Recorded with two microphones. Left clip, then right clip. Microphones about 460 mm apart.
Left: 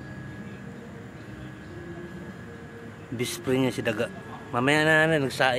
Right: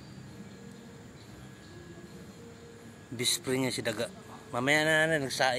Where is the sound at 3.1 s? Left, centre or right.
Right.